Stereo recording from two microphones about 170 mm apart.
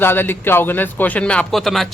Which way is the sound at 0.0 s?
15° left (ahead or behind).